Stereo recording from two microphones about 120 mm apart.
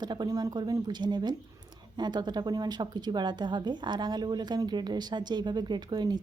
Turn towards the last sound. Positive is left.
turn(degrees=-35)  # may be behind; listen again after turning